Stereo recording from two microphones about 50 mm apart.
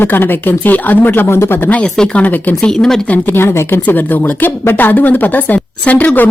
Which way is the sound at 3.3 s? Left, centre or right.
Left.